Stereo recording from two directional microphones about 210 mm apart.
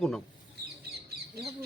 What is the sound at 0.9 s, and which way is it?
Duck, 50° right (ahead or behind).